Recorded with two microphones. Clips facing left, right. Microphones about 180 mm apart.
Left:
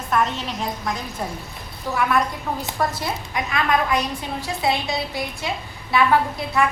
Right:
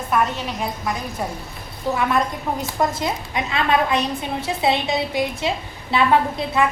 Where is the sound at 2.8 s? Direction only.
20° right (ahead or behind).